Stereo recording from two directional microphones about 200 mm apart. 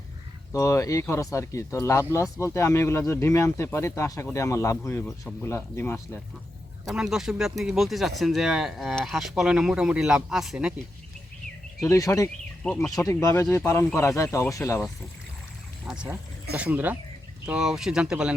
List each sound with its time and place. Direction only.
0.5 s speech: 15° left (ahead or behind)
5.0 s speech: centre (ahead or behind)
5.5 s speech: 10° left (ahead or behind)
6.8 s speech: centre (ahead or behind)
11.8 s speech: 15° left (ahead or behind)
12.6 s speech: 5° left (ahead or behind)
12.9 s speech: 15° left (ahead or behind)
15.9 s speech: 5° right (ahead or behind)